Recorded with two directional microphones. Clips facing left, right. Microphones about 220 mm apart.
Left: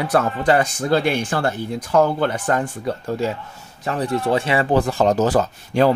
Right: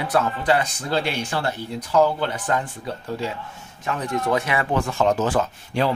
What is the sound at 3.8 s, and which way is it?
Speech, 35° left (ahead or behind).